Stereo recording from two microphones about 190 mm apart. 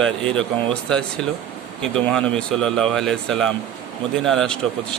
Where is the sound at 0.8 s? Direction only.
5° left (ahead or behind).